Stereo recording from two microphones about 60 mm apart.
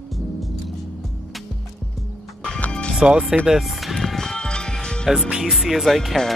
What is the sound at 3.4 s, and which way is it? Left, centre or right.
Music, centre.